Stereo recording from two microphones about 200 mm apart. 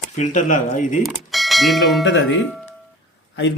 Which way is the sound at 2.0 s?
65° left (ahead or behind).